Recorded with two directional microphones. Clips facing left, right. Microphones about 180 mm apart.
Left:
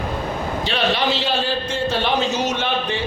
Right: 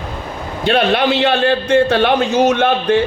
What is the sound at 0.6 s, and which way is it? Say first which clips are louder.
A man's voice: right 8 dB; 55° right (ahead or behind).